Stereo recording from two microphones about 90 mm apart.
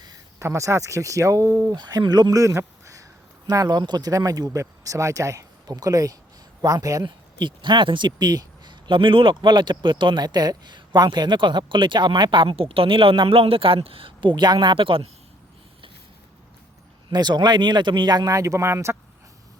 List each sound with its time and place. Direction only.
0.0 s a sound: 45° right (ahead or behind)
0.4 s speech: 35° right (ahead or behind)
1.7 s speech: 50° right (ahead or behind)
7.0 s speech: 60° right (ahead or behind)
10.2 s speech: 45° right (ahead or behind); by 15.0 s 75° right (ahead or behind)
17.1 s speech: 55° right (ahead or behind)
18.3 s speech: 35° right (ahead or behind)